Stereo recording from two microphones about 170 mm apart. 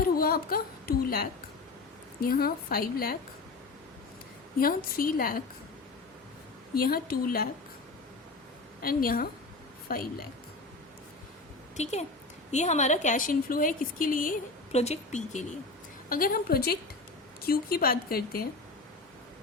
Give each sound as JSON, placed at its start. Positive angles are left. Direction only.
{"t": 0.0, "sound": "a sound", "side_deg": 60}
{"t": 2.2, "sound": "speech", "side_deg": 60}
{"t": 4.6, "sound": "speech", "side_deg": 60}
{"t": 6.7, "sound": "speech", "side_deg": 60}
{"t": 8.8, "sound": "speech", "side_deg": 60}
{"t": 11.8, "sound": "a woman's voice", "side_deg": 40}
{"t": 14.8, "sound": "a woman's voice", "side_deg": 40}
{"t": 16.0, "sound": "speech", "side_deg": 55}